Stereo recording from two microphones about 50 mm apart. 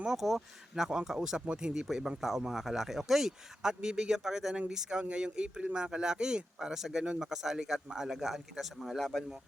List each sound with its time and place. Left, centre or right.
0.0 s speech: centre
9.0 s speech: centre